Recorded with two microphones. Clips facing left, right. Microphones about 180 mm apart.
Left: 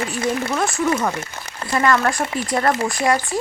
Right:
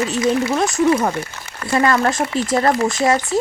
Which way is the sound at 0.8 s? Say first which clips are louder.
Right 4 dB; 30° right (ahead or behind).